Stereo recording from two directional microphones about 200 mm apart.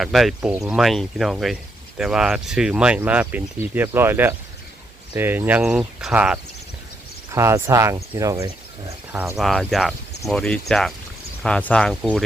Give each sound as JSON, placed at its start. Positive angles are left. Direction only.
{"t": 0.0, "sound": "speech", "side_deg": 0}
{"t": 9.4, "sound": "speech", "side_deg": 0}